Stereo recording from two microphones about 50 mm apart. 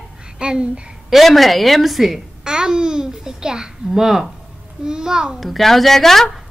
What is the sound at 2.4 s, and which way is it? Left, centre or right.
A child's voice, centre.